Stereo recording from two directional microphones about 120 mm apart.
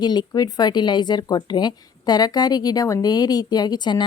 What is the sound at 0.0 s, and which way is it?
Speech, 35° left (ahead or behind).